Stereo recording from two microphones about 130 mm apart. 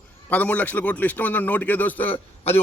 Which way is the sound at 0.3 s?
10° left (ahead or behind).